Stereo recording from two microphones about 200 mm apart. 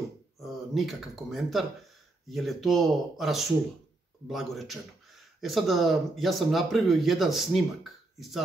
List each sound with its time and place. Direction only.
0.4 s speech: centre (ahead or behind)